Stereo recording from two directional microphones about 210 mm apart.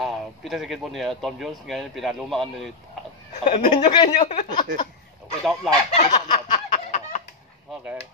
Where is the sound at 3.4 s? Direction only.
35° left (ahead or behind).